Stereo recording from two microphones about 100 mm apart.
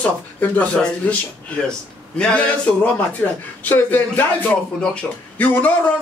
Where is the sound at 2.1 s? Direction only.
10° left (ahead or behind).